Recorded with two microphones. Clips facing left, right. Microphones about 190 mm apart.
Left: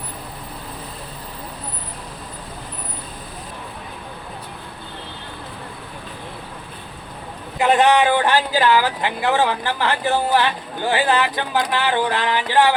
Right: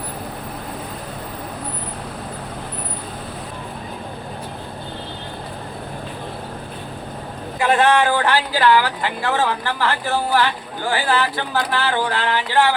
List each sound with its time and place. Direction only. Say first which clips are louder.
7.6 s speech: left 1 dB; 15° left (ahead or behind)